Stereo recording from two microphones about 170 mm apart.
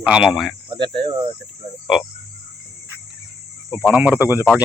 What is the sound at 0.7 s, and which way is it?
Cricket, 30° right (ahead or behind).